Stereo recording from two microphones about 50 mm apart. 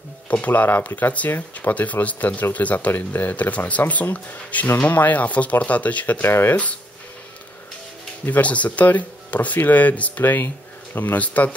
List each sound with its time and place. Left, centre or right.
0.3 s speech: left
6.2 s speech: left
8.3 s speech: left